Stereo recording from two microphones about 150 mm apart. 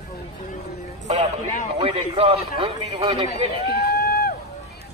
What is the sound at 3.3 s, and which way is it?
Speech, 90° left.